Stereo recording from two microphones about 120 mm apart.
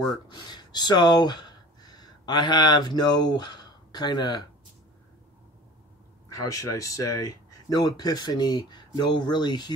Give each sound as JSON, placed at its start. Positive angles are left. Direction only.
{"t": 0.3, "sound": "speech", "side_deg": 35}
{"t": 6.2, "sound": "speech", "side_deg": 30}